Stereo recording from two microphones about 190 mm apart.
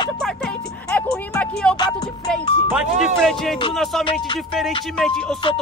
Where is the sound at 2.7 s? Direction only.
Centre (ahead or behind).